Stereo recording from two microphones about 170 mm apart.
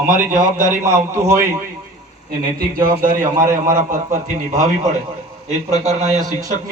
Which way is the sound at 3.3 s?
50° right (ahead or behind).